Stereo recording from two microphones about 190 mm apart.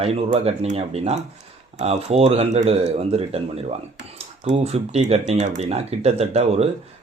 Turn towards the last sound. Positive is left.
turn(degrees=-35)  # may be behind; listen again after turning